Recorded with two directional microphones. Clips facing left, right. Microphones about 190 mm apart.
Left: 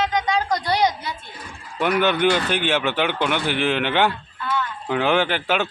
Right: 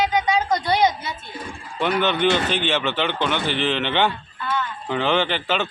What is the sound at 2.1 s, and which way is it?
Speech, 25° right (ahead or behind).